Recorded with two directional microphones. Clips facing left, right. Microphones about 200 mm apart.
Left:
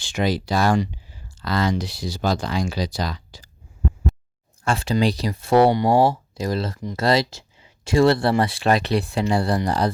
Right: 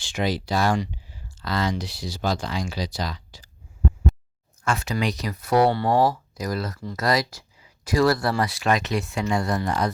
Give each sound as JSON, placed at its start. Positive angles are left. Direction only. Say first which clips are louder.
{"t": 0.1, "sound": "speech", "louder": "left 3 dB", "side_deg": 45}
{"t": 4.6, "sound": "speech", "louder": "left 5 dB", "side_deg": 30}
{"t": 6.0, "sound": "speech", "louder": "left 3 dB", "side_deg": 25}
{"t": 9.6, "sound": "music", "louder": "left 3 dB", "side_deg": 30}